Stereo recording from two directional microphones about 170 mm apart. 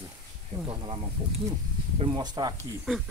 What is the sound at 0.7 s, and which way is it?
Speech, 30° right (ahead or behind).